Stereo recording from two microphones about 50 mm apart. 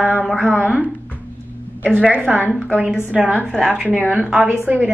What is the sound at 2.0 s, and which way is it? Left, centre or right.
A woman's voice, right.